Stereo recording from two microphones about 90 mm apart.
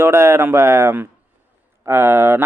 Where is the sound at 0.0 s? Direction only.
30° right (ahead or behind).